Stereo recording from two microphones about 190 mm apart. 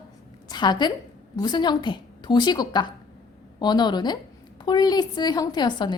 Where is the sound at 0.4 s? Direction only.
20° left (ahead or behind).